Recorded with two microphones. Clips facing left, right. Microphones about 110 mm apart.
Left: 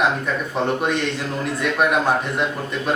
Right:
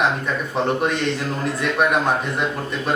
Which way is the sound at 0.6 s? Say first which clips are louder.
Right 1 dB; centre (ahead or behind).